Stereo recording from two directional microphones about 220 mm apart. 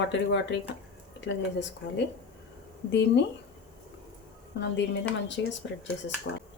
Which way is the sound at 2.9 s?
50° left (ahead or behind).